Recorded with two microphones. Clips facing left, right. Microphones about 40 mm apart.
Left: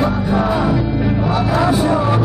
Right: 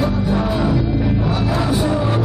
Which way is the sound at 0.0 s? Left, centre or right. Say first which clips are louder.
Left 2 dB; centre.